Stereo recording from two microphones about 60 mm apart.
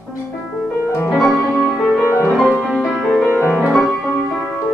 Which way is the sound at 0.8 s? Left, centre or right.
Left.